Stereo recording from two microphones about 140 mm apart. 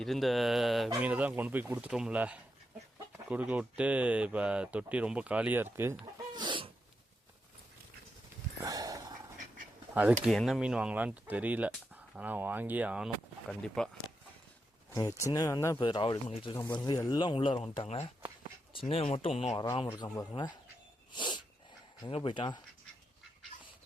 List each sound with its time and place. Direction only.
0.0 s speech: centre (ahead or behind); by 6.0 s 15° right (ahead or behind)
6.3 s dog: 35° right (ahead or behind)
8.6 s a sound: 25° right (ahead or behind)
9.9 s speech: 10° right (ahead or behind)
10.2 s speech: centre (ahead or behind)
13.5 s speech: 5° left (ahead or behind)
14.9 s speech: 25° left (ahead or behind)
15.8 s speech: 35° left (ahead or behind)
17.8 s speech: 50° left (ahead or behind); by 20.5 s 30° left (ahead or behind)
21.1 s sneeze: 30° left (ahead or behind)
22.0 s speech: 40° left (ahead or behind)